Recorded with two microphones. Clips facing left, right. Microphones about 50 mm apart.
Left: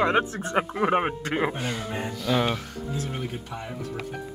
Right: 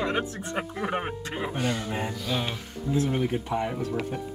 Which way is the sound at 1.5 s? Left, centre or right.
Centre.